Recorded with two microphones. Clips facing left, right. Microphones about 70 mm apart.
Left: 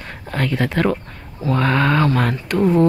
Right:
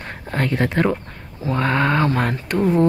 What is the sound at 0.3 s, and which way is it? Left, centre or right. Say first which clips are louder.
Speech: even; right.